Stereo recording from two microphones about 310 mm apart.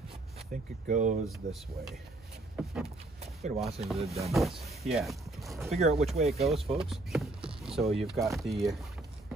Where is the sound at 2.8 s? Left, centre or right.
Centre.